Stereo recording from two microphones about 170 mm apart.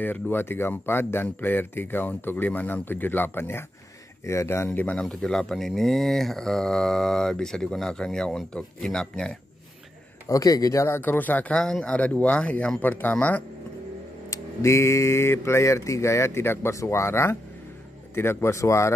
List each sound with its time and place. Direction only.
0.0 s speech: 10° left (ahead or behind)
10.2 s speech: 20° left (ahead or behind)